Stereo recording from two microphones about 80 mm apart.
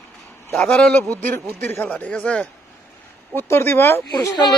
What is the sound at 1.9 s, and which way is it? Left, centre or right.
Speech, centre.